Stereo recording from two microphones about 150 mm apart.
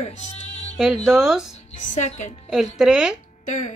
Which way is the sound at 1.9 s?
50° left (ahead or behind).